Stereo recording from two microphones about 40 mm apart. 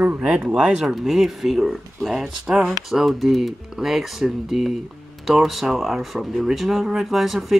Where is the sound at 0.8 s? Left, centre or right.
Centre.